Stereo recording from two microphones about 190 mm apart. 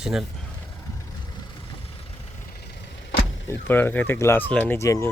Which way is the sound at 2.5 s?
55° left (ahead or behind).